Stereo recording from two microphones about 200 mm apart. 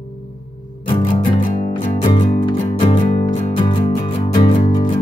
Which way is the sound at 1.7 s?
20° left (ahead or behind).